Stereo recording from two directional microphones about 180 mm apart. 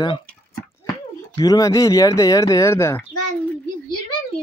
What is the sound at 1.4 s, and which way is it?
Speech, 20° left (ahead or behind).